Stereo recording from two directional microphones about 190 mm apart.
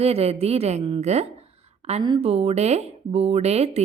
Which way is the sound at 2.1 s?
25° right (ahead or behind).